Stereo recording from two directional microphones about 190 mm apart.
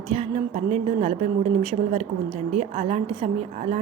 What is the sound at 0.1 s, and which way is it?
A woman's voice, 30° right (ahead or behind).